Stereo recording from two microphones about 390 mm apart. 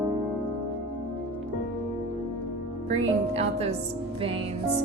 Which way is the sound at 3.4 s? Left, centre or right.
Centre.